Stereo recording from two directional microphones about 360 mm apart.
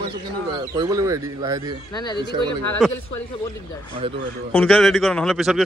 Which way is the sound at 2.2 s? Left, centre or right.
Centre.